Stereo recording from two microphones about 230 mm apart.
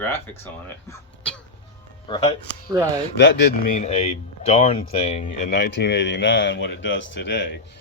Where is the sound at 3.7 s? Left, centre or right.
Left.